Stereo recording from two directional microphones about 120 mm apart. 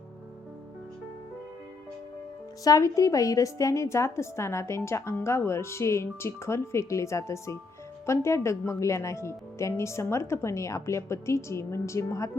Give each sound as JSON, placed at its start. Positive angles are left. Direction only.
{"t": 2.6, "sound": "a woman's voice", "side_deg": 30}